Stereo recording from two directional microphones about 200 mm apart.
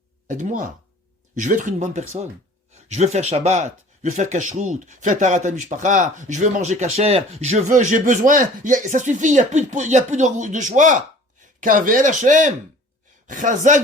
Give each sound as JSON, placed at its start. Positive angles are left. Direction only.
{"t": 0.3, "sound": "speech", "side_deg": -40}